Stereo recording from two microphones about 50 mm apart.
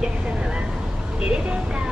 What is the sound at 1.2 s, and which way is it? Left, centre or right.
Vehicle, centre.